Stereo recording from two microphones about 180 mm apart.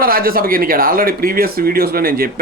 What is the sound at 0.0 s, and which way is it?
Speech, 55° right (ahead or behind).